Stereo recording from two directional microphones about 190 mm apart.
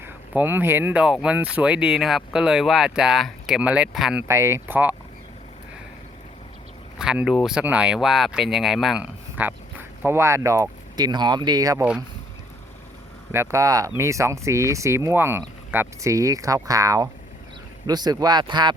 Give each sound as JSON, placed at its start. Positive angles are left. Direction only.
{"t": 0.0, "sound": "speech", "side_deg": -10}
{"t": 7.0, "sound": "speech", "side_deg": -5}
{"t": 13.3, "sound": "speech", "side_deg": -15}